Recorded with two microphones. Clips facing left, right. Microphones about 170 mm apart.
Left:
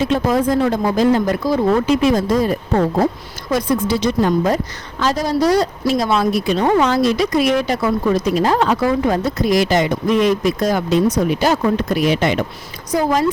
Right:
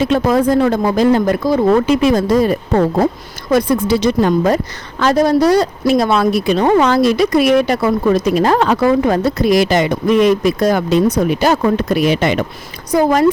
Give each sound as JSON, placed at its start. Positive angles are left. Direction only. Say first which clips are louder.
{"t": 0.0, "sound": "speech", "louder": "right 3 dB", "side_deg": -70}
{"t": 3.5, "sound": "a woman's voice", "louder": "right 4 dB", "side_deg": -65}